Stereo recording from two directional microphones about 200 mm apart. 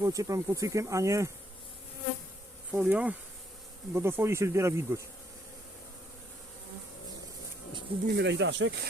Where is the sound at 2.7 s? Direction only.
5° right (ahead or behind).